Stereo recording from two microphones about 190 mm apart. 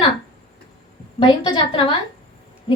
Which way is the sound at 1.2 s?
25° left (ahead or behind).